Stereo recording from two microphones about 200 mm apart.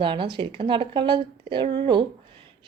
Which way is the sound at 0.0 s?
25° right (ahead or behind).